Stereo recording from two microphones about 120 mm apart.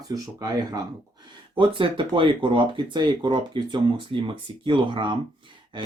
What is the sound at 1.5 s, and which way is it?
Speech, 45° right (ahead or behind).